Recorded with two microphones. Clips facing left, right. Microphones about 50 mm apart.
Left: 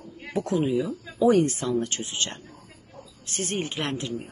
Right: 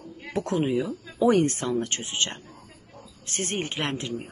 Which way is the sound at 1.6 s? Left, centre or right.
Right.